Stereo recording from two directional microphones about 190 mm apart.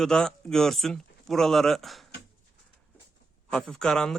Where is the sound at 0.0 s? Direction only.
5° left (ahead or behind).